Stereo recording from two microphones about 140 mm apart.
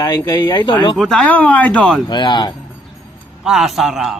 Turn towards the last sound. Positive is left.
turn(degrees=0)  # may be behind; listen again after turning